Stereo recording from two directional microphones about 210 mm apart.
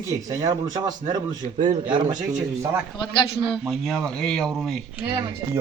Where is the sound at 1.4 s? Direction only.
35° right (ahead or behind).